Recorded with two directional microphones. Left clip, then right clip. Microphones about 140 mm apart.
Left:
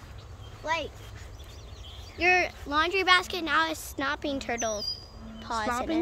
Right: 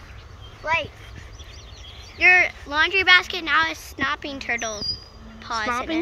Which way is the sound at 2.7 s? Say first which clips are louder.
Right 6 dB; 90° left.